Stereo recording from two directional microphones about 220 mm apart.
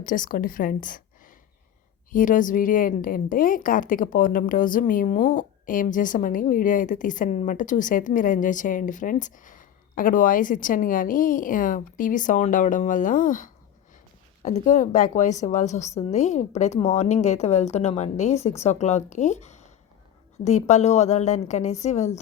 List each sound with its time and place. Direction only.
0.0 s a woman's voice: 40° left (ahead or behind)
2.1 s a woman's voice: 35° left (ahead or behind)